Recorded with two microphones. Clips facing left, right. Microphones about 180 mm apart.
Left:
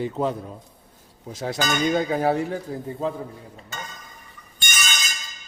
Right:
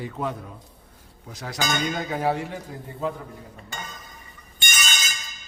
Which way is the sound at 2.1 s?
40° left (ahead or behind).